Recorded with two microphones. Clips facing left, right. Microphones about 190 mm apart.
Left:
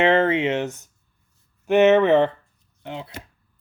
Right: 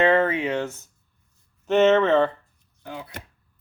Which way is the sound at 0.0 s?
25° left (ahead or behind).